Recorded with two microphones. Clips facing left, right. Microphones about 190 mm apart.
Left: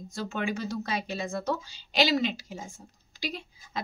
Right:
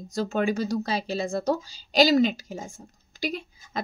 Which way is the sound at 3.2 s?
50° right (ahead or behind).